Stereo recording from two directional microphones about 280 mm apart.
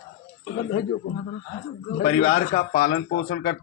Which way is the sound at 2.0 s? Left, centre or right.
Left.